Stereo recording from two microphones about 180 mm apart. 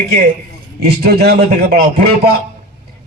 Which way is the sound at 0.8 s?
60° right (ahead or behind).